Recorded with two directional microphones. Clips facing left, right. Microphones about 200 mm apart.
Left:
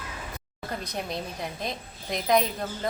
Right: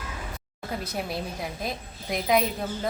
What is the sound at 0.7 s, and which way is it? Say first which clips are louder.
Speech: right 2 dB; 5° right (ahead or behind).